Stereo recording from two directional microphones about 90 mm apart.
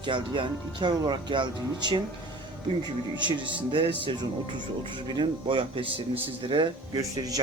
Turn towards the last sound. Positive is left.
turn(degrees=-40)  # may be behind; listen again after turning